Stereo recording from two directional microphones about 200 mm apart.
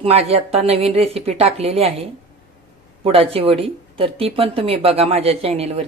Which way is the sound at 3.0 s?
30° right (ahead or behind).